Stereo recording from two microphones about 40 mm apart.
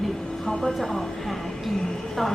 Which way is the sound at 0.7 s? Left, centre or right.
Centre.